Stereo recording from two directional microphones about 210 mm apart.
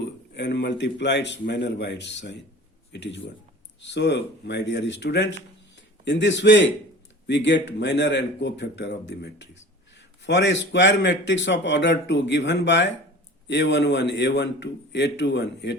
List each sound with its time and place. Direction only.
0.0 s speech: 55° left (ahead or behind)